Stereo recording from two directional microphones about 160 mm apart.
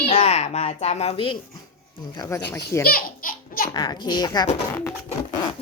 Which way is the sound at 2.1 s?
25° left (ahead or behind).